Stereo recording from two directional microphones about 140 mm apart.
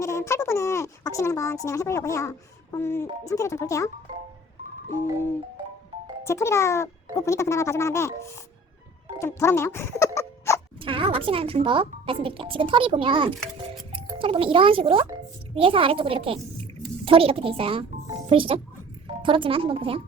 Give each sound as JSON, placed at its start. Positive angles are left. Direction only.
{"t": 0.0, "sound": "a sound", "side_deg": 20}
{"t": 2.7, "sound": "speech", "side_deg": 15}
{"t": 6.2, "sound": "speech", "side_deg": 20}
{"t": 9.1, "sound": "speech", "side_deg": 20}
{"t": 10.8, "sound": "a woman's voice", "side_deg": -40}